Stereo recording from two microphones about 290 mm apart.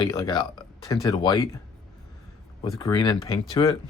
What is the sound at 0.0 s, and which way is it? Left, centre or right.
Speech, centre.